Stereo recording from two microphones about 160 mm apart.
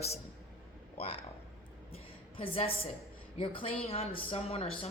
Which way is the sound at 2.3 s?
35° left (ahead or behind).